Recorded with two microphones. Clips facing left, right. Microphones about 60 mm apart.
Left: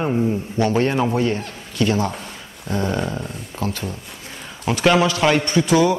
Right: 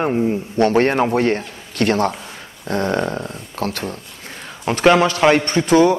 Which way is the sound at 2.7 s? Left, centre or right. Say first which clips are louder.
Right 3 dB; right.